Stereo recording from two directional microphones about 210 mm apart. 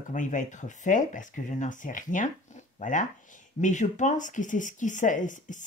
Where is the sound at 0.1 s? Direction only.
35° left (ahead or behind).